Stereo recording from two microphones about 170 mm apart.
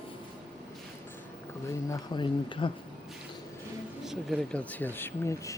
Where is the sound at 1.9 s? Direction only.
30° left (ahead or behind).